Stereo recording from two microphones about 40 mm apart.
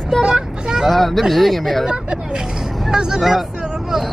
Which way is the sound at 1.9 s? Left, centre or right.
Centre.